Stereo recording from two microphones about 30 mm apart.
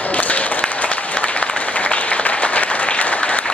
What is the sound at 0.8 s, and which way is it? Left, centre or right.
Applause, left.